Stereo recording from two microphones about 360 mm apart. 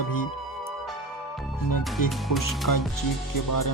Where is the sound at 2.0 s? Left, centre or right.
Left.